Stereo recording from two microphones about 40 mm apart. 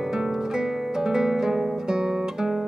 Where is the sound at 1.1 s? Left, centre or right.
Centre.